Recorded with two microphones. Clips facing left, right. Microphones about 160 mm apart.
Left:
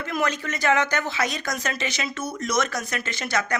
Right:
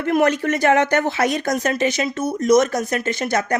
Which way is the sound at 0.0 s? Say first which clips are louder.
Right 9 dB; 60° right (ahead or behind).